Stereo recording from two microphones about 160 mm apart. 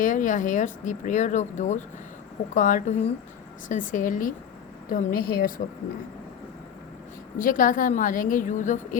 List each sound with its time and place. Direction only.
0.0 s a woman's voice: 50° left (ahead or behind)
7.3 s a woman's voice: 55° left (ahead or behind)